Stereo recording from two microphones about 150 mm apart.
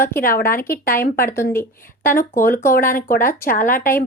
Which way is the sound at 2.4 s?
70° left (ahead or behind).